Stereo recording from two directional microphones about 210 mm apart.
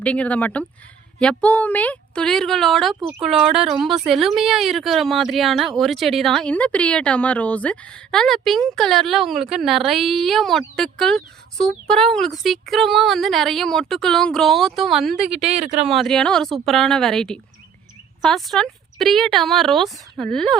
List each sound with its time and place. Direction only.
0.0 s speech: 5° left (ahead or behind)
15.6 s speech: 30° right (ahead or behind)
15.9 s speech: centre (ahead or behind)